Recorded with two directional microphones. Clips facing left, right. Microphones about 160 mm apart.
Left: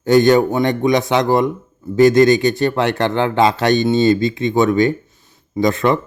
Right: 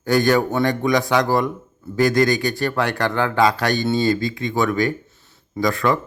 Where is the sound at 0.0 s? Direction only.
20° left (ahead or behind).